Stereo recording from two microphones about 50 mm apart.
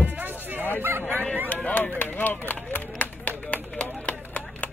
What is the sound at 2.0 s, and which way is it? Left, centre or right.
Run, left.